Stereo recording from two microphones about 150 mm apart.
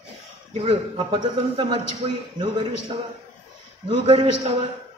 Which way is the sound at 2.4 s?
30° right (ahead or behind).